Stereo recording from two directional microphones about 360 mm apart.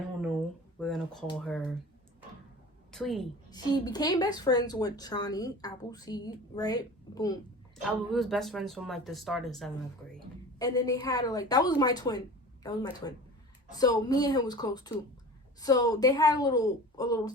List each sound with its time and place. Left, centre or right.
0.8 s a sound: centre
1.3 s speech: centre
2.9 s a woman's voice: centre
3.5 s a woman's voice: centre